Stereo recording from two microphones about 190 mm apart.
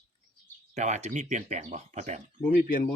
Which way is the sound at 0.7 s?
40° right (ahead or behind).